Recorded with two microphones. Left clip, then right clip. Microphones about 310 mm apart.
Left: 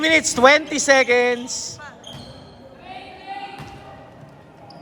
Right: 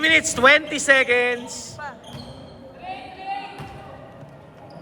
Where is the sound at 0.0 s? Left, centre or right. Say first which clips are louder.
Left 1 dB; centre.